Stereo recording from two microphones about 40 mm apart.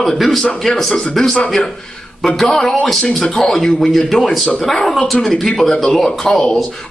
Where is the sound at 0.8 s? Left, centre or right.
Centre.